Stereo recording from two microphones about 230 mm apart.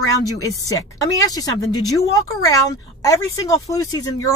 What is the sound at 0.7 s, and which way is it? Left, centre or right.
Speech, centre.